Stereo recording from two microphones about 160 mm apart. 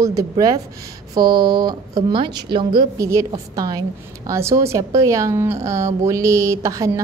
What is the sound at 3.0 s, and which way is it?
Speech, 20° right (ahead or behind).